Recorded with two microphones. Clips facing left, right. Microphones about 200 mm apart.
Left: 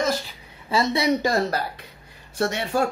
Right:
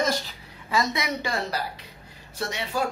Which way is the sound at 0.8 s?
35° left (ahead or behind).